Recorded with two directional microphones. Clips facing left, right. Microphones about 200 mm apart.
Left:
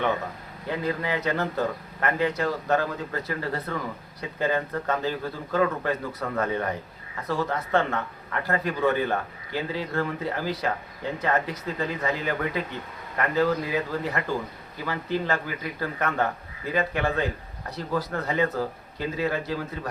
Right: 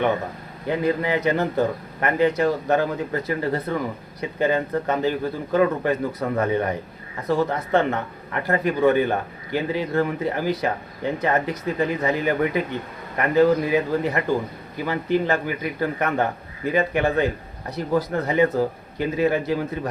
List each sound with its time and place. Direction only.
0.7 s a man's voice: 20° right (ahead or behind)